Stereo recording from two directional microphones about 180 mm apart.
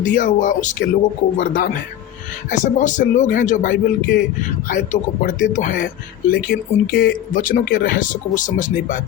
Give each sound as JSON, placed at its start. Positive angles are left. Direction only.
{"t": 0.2, "sound": "speech", "side_deg": 45}